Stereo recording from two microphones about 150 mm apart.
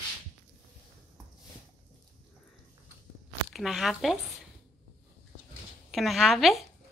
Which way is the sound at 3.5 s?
Centre (ahead or behind).